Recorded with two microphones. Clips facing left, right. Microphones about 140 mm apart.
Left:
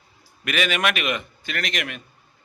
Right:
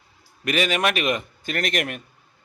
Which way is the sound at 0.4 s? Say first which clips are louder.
Right 2 dB; 35° right (ahead or behind).